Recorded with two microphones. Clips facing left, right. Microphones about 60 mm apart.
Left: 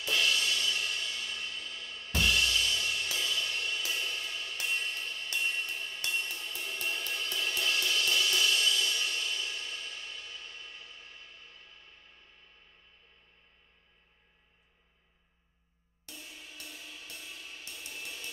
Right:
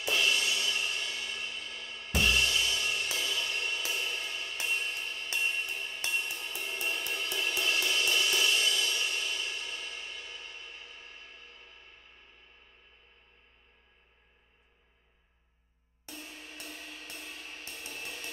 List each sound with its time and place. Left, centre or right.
0.0 s music: right
16.1 s music: right